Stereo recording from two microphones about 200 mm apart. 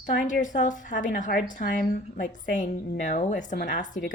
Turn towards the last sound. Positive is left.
turn(degrees=40)  # may be behind; listen again after turning